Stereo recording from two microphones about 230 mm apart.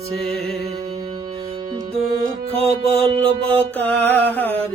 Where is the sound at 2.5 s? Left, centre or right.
Right.